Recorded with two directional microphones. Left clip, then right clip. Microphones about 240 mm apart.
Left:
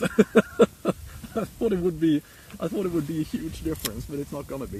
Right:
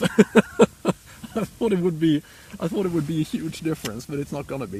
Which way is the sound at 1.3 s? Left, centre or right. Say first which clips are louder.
Right 2 dB; right.